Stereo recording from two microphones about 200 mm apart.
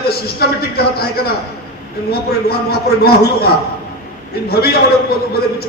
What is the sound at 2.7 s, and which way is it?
Speech, 50° left (ahead or behind).